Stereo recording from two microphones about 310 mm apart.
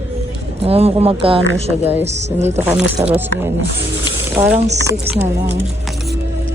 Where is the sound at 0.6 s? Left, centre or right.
Centre.